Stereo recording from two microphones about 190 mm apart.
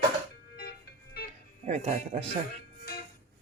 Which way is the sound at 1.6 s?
35° right (ahead or behind).